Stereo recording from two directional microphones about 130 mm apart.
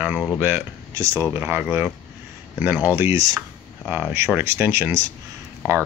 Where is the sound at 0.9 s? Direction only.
25° right (ahead or behind).